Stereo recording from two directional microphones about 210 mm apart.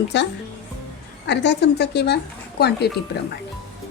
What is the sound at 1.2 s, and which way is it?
Speech, 55° left (ahead or behind).